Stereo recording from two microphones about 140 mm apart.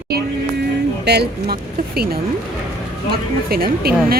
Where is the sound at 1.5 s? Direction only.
90° right.